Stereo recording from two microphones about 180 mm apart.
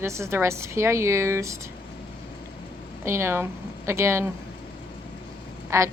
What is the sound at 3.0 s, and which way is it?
A woman's voice, 15° right (ahead or behind).